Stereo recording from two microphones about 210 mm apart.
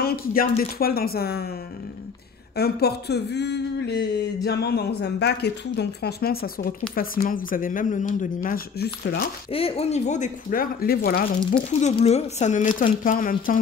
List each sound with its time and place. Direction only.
0.0 s speech: 45° left (ahead or behind)
2.5 s speech: 50° left (ahead or behind)
9.5 s speech: 25° left (ahead or behind); by 11.2 s 45° left (ahead or behind)
11.5 s speech: 30° left (ahead or behind)